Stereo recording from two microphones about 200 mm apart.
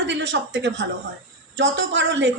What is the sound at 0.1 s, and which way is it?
A woman's voice, 65° right (ahead or behind).